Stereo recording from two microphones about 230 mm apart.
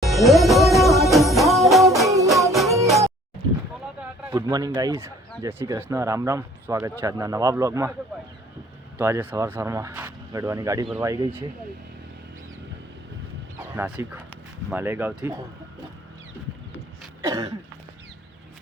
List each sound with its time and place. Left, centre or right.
0.0 s music: centre
4.3 s speech: centre
9.0 s speech: centre
13.7 s speech: centre
17.2 s speech: centre